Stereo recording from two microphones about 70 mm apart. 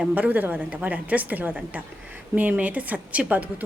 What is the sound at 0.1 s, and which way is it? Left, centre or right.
A woman's voice, right.